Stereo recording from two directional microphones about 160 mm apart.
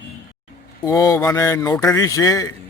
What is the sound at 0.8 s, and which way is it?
Speech, 20° left (ahead or behind).